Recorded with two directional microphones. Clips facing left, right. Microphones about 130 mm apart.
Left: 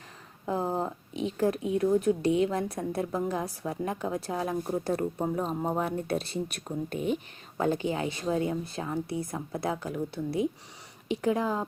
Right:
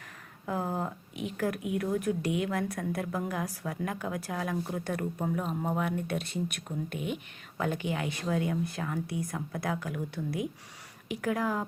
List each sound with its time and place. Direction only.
0.4 s speech: 25° left (ahead or behind)